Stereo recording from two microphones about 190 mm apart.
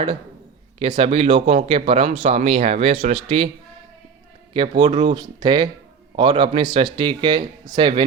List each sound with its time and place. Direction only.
0.8 s speech: 25° right (ahead or behind)
4.8 s a man's voice: 30° right (ahead or behind)